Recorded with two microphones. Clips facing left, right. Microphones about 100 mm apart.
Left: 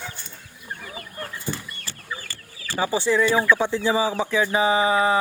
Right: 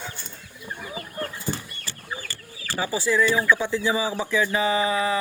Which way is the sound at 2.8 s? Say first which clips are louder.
Left 2 dB; 25° left (ahead or behind).